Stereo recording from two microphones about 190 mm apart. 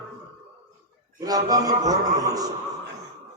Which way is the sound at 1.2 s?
20° right (ahead or behind).